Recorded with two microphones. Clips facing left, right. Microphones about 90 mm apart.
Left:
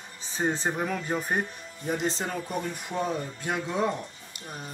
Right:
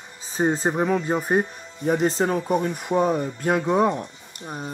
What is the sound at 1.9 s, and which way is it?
Speech, 45° right (ahead or behind).